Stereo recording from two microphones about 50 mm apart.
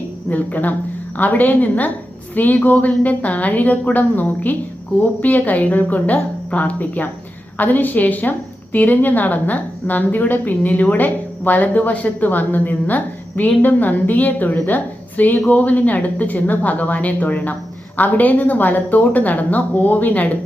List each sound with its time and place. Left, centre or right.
0.3 s a woman's voice: left